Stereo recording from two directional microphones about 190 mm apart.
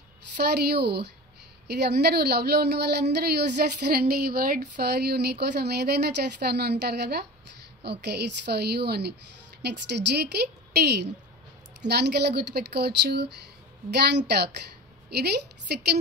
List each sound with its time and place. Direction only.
0.4 s speech: 60° right (ahead or behind)